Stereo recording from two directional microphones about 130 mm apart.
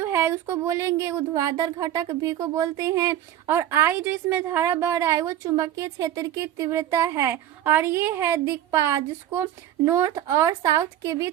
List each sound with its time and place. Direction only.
0.0 s speech: 20° right (ahead or behind)